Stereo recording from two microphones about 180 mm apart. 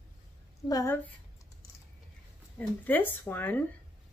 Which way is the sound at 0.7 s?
20° left (ahead or behind).